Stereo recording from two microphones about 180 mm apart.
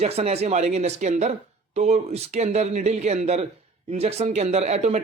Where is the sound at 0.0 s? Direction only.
35° right (ahead or behind).